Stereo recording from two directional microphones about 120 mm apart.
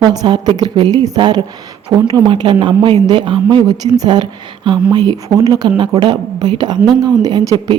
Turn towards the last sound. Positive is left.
turn(degrees=-35)  # may be behind; listen again after turning